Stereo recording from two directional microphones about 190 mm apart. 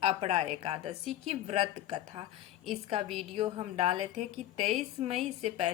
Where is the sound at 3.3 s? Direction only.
35° right (ahead or behind).